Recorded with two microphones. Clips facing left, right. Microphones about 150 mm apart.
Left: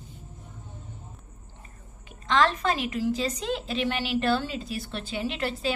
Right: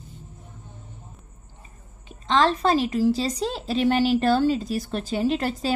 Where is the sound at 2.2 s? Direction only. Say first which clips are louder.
Right 3 dB; 30° right (ahead or behind).